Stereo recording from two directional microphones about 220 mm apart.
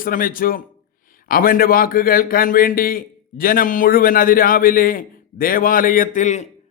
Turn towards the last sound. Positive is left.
turn(degrees=35)  # may be behind; listen again after turning